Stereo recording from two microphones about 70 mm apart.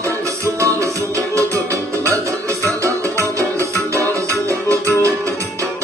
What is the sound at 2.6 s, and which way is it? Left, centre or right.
Music, right.